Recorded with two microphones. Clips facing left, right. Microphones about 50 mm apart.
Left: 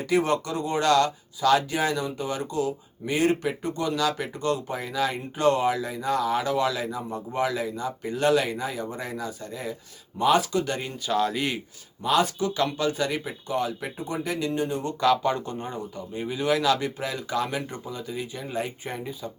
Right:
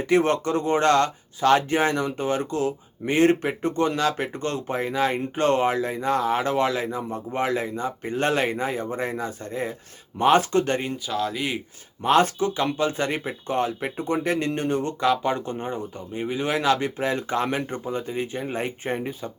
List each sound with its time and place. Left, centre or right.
0.2 s speech: right
11.0 s speech: centre
12.0 s speech: right
12.5 s speech: right
15.0 s speech: right